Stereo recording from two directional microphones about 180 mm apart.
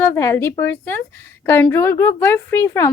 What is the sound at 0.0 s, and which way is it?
A woman's voice, 15° left (ahead or behind).